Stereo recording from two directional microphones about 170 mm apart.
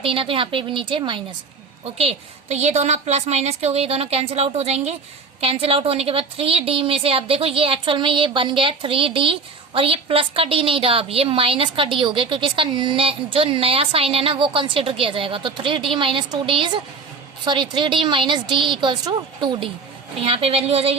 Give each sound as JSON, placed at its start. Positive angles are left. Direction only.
{"t": 0.0, "sound": "a woman's voice", "side_deg": -30}